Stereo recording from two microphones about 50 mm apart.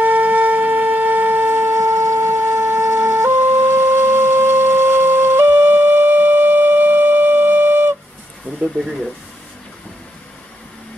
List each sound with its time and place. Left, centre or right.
0.0 s shofar: right